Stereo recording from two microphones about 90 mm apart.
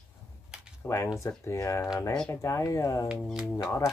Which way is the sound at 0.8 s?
35° left (ahead or behind).